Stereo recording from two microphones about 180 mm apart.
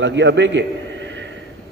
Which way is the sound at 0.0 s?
85° right.